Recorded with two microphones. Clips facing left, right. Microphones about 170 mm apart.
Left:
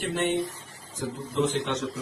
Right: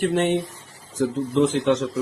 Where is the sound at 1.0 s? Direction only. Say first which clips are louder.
Right 10 dB; 70° right (ahead or behind).